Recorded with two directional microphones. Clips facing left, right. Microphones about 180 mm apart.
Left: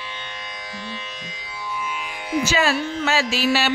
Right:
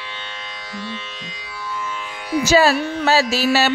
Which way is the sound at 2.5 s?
35° right (ahead or behind).